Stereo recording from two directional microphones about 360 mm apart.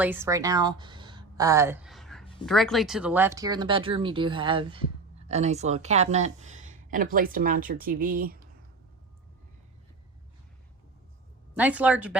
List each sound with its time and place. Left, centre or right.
0.0 s speech: centre; by 8.4 s right
11.5 s speech: centre